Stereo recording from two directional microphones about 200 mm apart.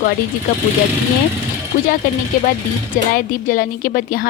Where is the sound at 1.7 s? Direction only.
45° left (ahead or behind).